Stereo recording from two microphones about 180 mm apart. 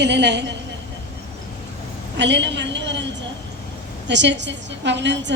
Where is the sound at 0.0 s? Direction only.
70° right (ahead or behind).